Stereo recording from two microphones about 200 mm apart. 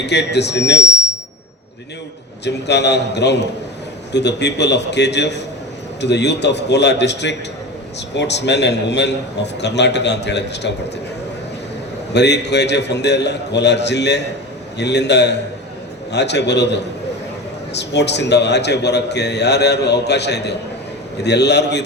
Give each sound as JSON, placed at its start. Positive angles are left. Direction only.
{"t": 0.0, "sound": "a man's voice", "side_deg": 60}
{"t": 2.4, "sound": "a man's voice", "side_deg": 60}
{"t": 12.1, "sound": "a man's voice", "side_deg": 60}